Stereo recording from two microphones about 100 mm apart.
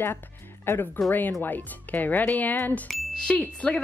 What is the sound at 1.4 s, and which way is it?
A woman's voice, 15° left (ahead or behind).